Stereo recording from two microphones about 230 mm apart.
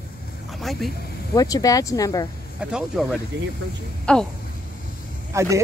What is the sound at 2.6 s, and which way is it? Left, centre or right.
Speech, centre.